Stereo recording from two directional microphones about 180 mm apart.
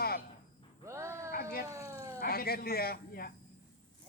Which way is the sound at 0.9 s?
15° right (ahead or behind).